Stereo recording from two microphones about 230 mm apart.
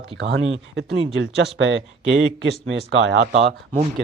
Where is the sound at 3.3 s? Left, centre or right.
Right.